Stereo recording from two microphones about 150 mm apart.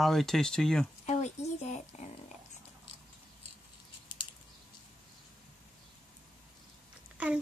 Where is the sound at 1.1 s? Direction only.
50° left (ahead or behind).